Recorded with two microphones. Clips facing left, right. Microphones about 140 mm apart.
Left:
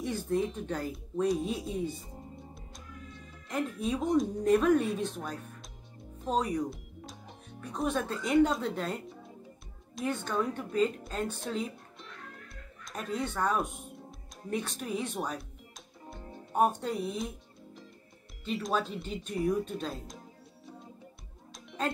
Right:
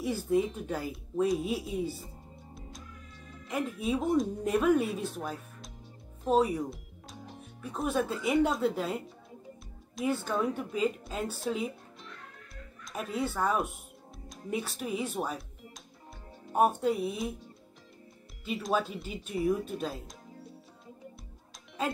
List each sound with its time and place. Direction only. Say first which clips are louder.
0.0 s speech: right 2 dB; 5° right (ahead or behind)
3.4 s a woman's voice: even; 5° right (ahead or behind)
18.4 s speech: right 1 dB; 5° right (ahead or behind)
21.8 s speech: even; 5° right (ahead or behind)